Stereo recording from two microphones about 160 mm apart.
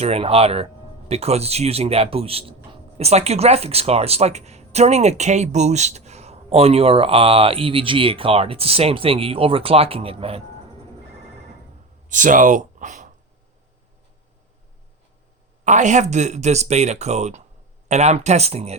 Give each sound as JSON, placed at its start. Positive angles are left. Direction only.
{"t": 0.0, "sound": "speech", "side_deg": -40}
{"t": 12.0, "sound": "speech", "side_deg": -55}
{"t": 15.6, "sound": "speech", "side_deg": -50}